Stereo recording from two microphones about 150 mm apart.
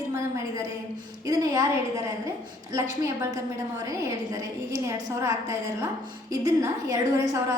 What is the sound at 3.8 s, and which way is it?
A woman's voice, 25° right (ahead or behind).